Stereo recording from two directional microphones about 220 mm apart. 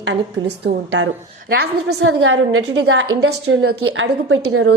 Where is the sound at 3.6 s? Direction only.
55° right (ahead or behind).